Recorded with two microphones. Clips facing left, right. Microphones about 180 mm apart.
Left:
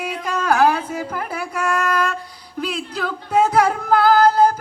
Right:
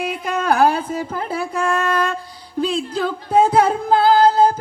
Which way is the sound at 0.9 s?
25° right (ahead or behind).